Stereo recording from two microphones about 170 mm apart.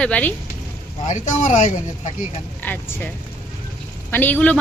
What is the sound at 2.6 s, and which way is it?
Speech, 10° left (ahead or behind).